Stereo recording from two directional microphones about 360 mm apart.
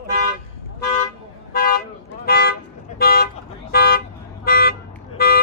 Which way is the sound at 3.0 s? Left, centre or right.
Left.